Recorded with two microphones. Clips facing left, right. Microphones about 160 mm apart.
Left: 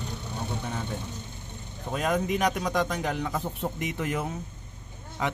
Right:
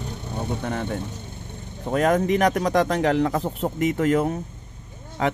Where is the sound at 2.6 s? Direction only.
85° right.